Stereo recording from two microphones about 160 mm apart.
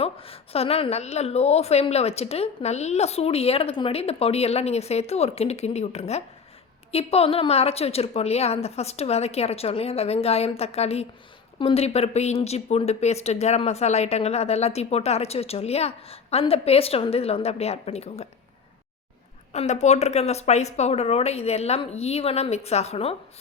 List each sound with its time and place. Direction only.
0.0 s speech: 35° left (ahead or behind)
19.5 s speech: 45° left (ahead or behind)